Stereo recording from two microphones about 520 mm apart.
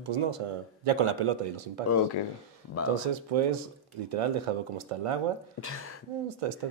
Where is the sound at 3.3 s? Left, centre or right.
Right.